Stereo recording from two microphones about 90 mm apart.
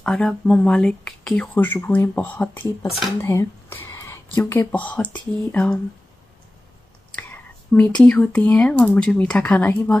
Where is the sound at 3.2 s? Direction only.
30° left (ahead or behind); by 5.7 s 15° left (ahead or behind).